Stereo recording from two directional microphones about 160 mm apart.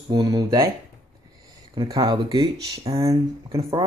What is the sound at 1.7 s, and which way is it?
Speech, 30° right (ahead or behind).